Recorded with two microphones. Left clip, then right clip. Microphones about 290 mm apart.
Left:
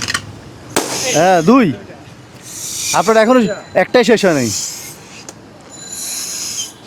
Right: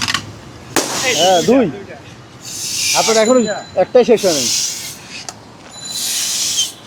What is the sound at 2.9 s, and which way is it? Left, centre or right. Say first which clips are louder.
Speech: left 2 dB; left.